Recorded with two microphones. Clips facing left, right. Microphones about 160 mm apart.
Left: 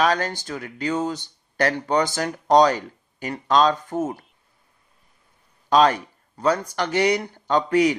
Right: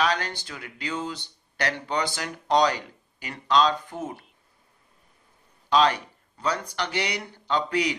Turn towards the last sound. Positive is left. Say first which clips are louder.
# left 7 dB
turn(degrees=45)  # may be behind; listen again after turning